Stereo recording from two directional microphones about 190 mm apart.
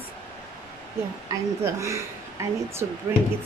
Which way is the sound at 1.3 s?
15° right (ahead or behind).